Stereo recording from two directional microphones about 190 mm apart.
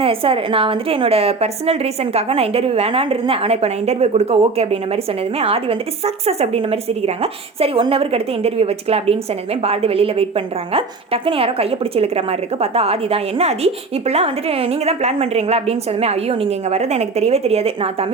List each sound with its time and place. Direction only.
0.0 s a woman's voice: 30° right (ahead or behind)